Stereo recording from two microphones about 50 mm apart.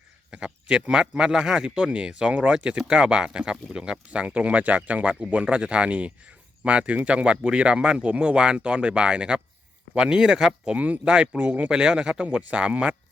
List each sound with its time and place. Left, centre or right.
0.3 s speech: right
11.7 s speech: centre